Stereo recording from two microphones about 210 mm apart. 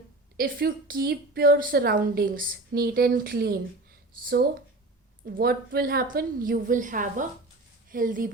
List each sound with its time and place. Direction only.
0.3 s speech: 45° right (ahead or behind)
5.2 s a woman's voice: 45° right (ahead or behind)